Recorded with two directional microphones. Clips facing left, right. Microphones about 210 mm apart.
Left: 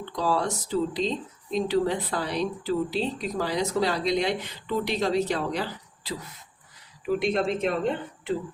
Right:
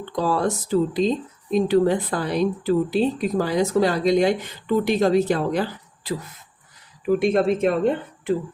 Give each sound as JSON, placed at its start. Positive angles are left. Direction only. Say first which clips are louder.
{"t": 0.2, "sound": "speech", "louder": "right 4 dB", "side_deg": -50}